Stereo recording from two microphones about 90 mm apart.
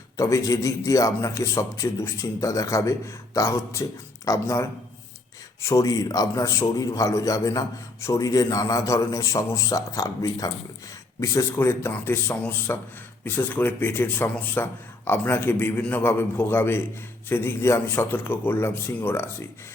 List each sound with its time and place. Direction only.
0.2 s a man's voice: 35° left (ahead or behind)
11.5 s a man's voice: 25° left (ahead or behind)